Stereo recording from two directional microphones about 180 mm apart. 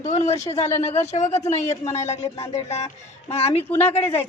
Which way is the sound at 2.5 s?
40° left (ahead or behind).